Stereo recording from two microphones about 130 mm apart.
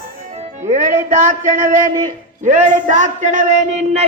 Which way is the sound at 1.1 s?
90° right.